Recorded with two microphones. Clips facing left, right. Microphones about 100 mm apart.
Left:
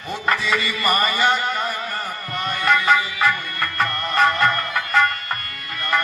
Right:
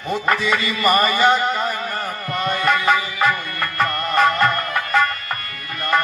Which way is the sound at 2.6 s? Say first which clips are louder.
Left 2 dB; 25° right (ahead or behind).